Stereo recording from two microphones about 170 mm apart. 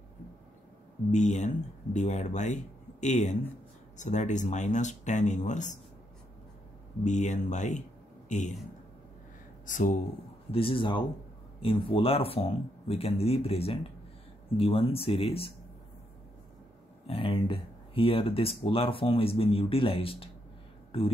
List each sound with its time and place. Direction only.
1.1 s speech: 45° left (ahead or behind)
7.1 s a man's voice: 45° left (ahead or behind)
9.7 s speech: 50° left (ahead or behind)
10.5 s speech: 30° left (ahead or behind)
17.0 s speech: 30° left (ahead or behind)